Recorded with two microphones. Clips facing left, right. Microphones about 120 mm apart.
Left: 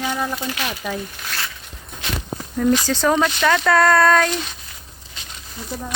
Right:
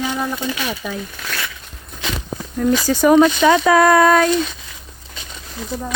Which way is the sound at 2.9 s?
10° right (ahead or behind).